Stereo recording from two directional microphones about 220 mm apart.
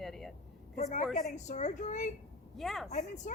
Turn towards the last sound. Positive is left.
turn(degrees=30)  # may be behind; listen again after turning